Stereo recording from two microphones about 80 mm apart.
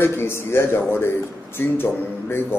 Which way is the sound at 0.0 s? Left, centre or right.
Left.